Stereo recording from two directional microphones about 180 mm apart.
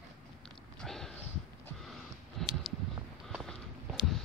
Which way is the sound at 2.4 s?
Centre (ahead or behind).